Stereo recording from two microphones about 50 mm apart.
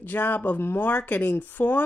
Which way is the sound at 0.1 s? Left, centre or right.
Left.